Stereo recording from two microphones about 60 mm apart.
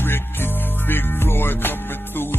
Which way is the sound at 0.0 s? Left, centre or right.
Left.